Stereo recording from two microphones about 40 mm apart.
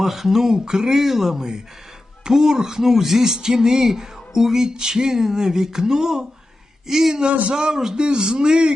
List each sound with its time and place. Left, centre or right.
0.0 s speech: centre